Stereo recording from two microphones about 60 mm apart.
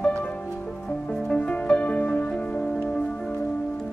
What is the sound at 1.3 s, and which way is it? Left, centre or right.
Music, centre.